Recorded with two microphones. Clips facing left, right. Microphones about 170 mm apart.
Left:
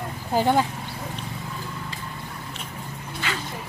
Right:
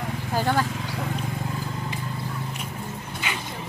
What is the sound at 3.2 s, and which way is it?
Vehicle, 20° right (ahead or behind).